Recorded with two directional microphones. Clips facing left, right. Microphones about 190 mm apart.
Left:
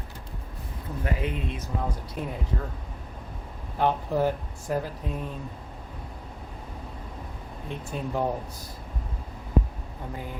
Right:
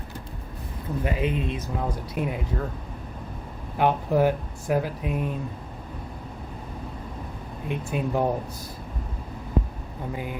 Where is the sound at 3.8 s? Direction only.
15° right (ahead or behind).